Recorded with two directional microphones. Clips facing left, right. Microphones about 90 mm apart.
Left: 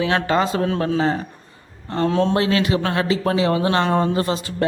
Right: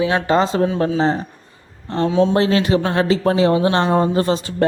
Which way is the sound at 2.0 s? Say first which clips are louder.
Right 3 dB; 5° right (ahead or behind).